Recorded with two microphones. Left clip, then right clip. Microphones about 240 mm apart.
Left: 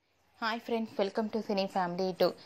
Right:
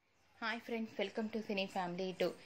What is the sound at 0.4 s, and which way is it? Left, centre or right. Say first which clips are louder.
A woman's voice: left 8 dB; left.